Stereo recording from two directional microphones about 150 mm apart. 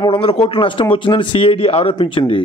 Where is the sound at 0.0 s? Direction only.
40° left (ahead or behind).